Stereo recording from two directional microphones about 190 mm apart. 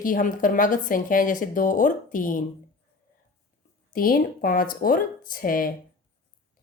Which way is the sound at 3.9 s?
50° left (ahead or behind).